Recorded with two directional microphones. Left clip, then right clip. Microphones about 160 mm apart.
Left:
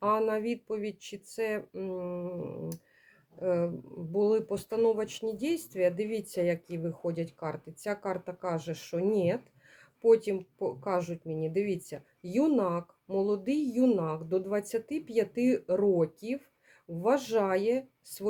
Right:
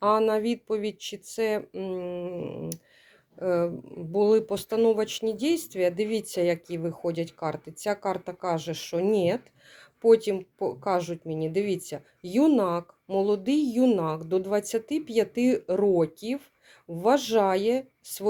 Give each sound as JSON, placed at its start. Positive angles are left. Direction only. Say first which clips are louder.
{"t": 0.0, "sound": "speech", "louder": "right 5 dB", "side_deg": -30}